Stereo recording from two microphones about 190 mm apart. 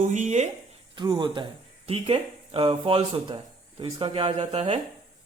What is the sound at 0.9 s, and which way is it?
Speech, 25° right (ahead or behind).